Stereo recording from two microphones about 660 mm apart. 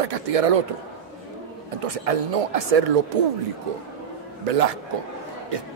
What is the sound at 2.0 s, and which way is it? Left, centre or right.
Speech, right.